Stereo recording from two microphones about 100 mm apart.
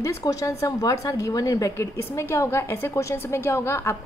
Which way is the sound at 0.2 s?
35° left (ahead or behind).